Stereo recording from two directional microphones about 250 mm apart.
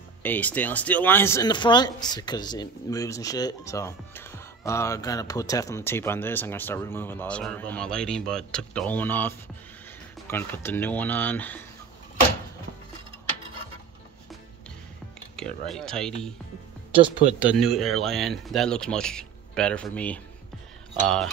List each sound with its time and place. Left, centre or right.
0.2 s speech: centre
15.3 s speech: centre
16.9 s speech: right
17.4 s speech: centre